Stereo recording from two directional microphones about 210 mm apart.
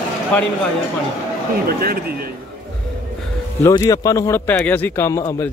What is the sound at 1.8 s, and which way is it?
Speech, 45° right (ahead or behind).